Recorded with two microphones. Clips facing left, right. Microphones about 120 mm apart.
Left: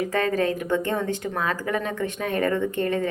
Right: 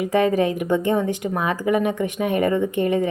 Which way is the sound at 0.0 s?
15° right (ahead or behind).